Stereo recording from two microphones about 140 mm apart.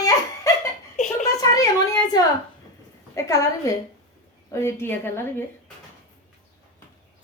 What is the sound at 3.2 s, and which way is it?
A woman's voice, 20° left (ahead or behind).